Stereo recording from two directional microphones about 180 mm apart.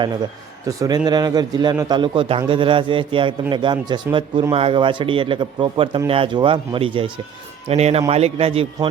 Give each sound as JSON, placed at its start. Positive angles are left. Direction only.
{"t": 0.7, "sound": "a man's voice", "side_deg": -20}